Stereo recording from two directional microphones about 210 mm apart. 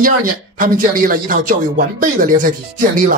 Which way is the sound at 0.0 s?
40° right (ahead or behind).